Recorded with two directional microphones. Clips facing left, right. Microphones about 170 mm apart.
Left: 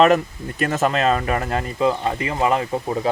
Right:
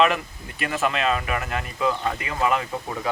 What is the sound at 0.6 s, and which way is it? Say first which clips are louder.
Speech: left 5 dB; 40° left (ahead or behind).